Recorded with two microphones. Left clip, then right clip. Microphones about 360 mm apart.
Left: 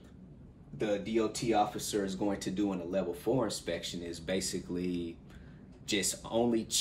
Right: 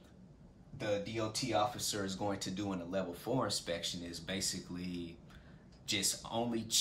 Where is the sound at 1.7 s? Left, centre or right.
Centre.